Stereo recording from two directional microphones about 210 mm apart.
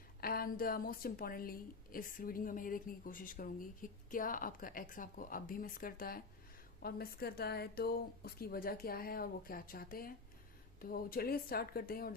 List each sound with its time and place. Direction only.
0.2 s a woman's voice: 45° left (ahead or behind)